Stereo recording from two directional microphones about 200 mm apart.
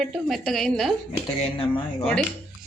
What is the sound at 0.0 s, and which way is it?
Speech, centre (ahead or behind).